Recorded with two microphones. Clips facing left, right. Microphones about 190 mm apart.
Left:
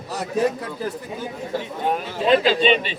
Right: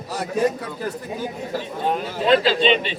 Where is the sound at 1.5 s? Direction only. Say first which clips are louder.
Even; 15° left (ahead or behind).